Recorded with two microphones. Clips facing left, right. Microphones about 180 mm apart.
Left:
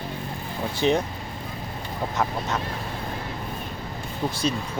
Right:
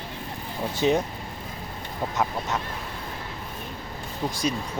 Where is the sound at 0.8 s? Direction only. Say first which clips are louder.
Even; 15° right (ahead or behind).